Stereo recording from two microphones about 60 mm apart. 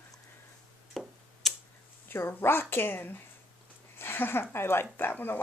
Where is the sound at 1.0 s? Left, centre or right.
Centre.